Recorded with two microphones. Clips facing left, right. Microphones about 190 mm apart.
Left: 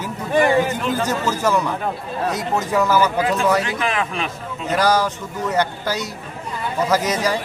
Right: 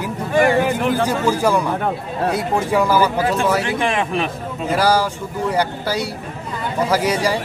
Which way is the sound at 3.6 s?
25° right (ahead or behind).